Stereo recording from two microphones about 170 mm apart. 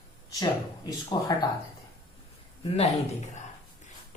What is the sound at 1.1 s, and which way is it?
Speech, 25° left (ahead or behind).